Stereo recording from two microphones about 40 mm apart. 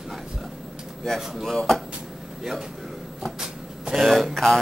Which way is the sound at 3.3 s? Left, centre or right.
Centre.